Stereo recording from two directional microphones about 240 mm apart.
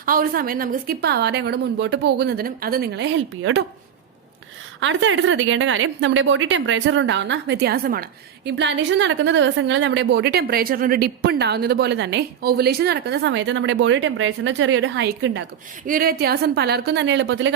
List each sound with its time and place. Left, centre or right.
0.0 s a woman's voice: right
4.8 s a woman's voice: right